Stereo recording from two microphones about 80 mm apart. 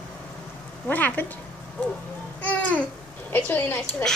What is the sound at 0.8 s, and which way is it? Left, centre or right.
Speech, left.